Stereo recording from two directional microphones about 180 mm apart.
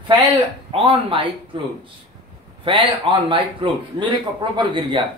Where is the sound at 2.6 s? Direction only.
30° right (ahead or behind).